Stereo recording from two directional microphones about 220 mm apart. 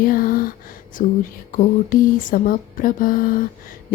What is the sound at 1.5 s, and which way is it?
Speech, 40° left (ahead or behind).